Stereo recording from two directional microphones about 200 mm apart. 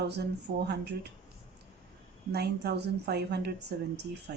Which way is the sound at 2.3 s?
55° right (ahead or behind).